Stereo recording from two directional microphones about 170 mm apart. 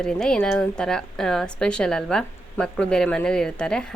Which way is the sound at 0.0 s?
5° left (ahead or behind).